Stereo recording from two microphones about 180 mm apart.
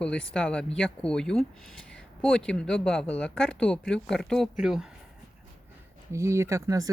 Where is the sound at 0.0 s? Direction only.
5° left (ahead or behind).